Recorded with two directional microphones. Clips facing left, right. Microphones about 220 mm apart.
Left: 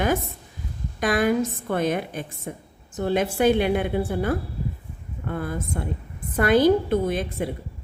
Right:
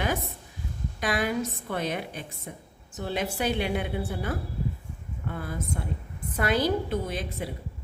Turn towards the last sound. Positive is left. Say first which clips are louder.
# left 7 dB
turn(degrees=50)  # may be behind; listen again after turning